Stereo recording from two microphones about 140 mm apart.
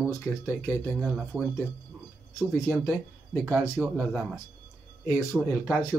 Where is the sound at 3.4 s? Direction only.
20° right (ahead or behind).